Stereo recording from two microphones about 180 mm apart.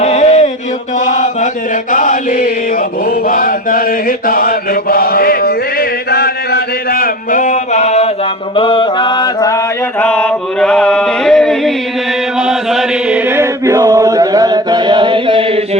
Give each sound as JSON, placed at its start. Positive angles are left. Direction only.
{"t": 0.0, "sound": "chant", "side_deg": 35}
{"t": 8.5, "sound": "mantra", "side_deg": 30}
{"t": 10.0, "sound": "chant", "side_deg": 5}